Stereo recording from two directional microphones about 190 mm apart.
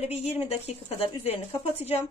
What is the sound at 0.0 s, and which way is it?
A woman's voice, 35° left (ahead or behind).